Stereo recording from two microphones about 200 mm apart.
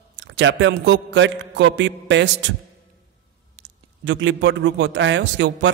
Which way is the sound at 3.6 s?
65° right (ahead or behind).